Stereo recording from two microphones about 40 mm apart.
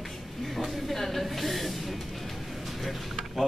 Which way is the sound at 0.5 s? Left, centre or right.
Centre.